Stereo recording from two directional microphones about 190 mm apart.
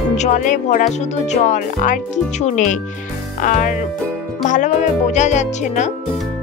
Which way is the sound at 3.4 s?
45° left (ahead or behind).